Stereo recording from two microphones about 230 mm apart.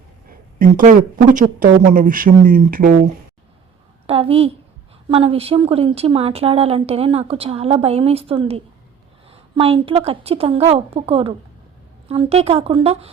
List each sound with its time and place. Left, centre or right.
0.3 s speech: right
4.0 s speech: right